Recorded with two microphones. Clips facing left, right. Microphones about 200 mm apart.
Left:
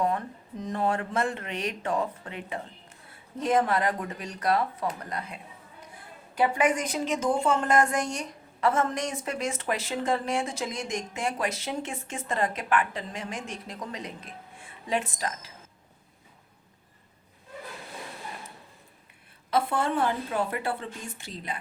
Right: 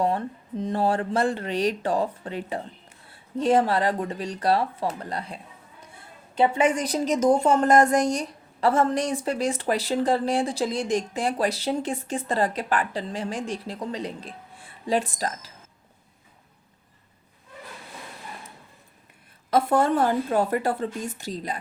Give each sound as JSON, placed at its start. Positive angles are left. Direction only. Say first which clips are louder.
{"t": 0.0, "sound": "a woman's voice", "louder": "right 3 dB", "side_deg": -30}
{"t": 19.5, "sound": "a woman's voice", "louder": "right 6 dB", "side_deg": -45}